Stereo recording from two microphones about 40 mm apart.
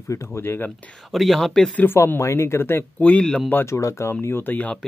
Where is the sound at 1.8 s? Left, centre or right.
Left.